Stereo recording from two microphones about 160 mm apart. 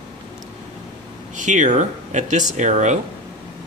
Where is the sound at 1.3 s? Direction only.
50° right (ahead or behind).